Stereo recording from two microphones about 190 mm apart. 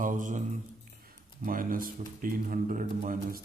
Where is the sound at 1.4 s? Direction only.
45° right (ahead or behind).